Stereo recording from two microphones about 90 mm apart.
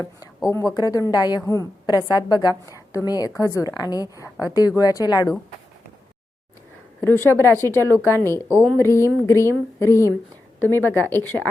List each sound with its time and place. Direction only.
0.4 s a woman's voice: 40° left (ahead or behind)
7.0 s a woman's voice: 30° left (ahead or behind)